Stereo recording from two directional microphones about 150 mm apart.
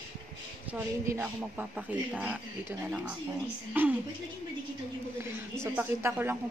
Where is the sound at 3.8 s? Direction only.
10° right (ahead or behind).